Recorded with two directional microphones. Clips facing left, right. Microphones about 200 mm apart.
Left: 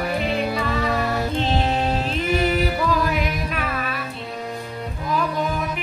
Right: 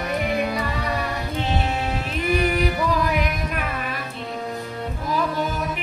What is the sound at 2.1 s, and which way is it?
Music, 15° right (ahead or behind).